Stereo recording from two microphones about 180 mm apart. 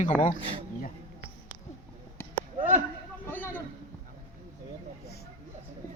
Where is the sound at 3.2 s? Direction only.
10° left (ahead or behind).